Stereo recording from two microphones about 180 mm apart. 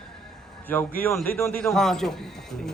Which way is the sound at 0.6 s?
10° left (ahead or behind).